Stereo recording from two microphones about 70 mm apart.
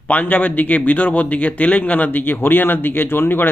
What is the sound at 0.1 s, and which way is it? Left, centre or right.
Speech, left.